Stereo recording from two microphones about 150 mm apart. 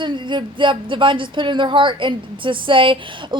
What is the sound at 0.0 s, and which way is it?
Speech, 30° right (ahead or behind).